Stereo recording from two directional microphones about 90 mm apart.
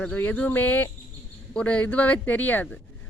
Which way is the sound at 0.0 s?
15° left (ahead or behind).